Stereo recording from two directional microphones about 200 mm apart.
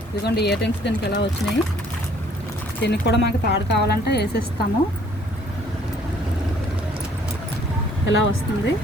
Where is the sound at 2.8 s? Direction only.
60° left (ahead or behind).